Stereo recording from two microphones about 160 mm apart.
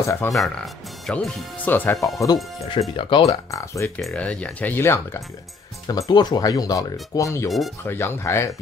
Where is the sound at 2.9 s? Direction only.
35° left (ahead or behind).